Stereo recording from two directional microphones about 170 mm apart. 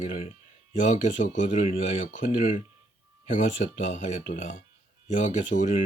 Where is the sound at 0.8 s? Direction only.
45° left (ahead or behind).